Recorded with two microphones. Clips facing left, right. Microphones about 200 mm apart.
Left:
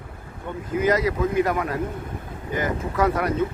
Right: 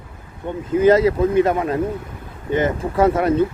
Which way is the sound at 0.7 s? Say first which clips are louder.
Right 7 dB; 30° right (ahead or behind).